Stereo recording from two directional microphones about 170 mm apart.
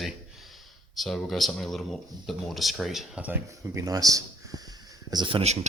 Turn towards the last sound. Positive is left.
turn(degrees=-35)  # may be behind; listen again after turning